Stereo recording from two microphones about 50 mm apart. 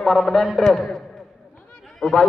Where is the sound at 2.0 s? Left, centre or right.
Centre.